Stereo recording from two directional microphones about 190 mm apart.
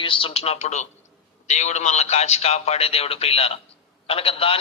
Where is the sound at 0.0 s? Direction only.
25° left (ahead or behind).